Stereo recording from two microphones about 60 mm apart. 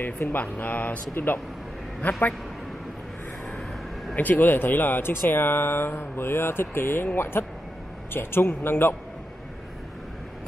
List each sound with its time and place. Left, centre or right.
0.0 s speech: left
2.0 s a man's voice: left
4.1 s speech: left